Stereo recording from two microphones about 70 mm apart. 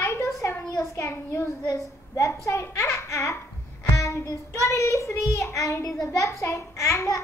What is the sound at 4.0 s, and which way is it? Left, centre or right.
Child singing, left.